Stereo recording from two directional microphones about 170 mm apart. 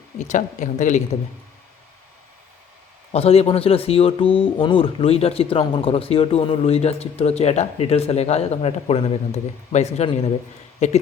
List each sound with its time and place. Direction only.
0.2 s a man's voice: 45° left (ahead or behind)
3.1 s speech: 35° left (ahead or behind)